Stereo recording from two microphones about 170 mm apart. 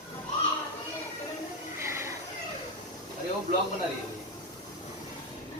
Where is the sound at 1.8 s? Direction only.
15° right (ahead or behind).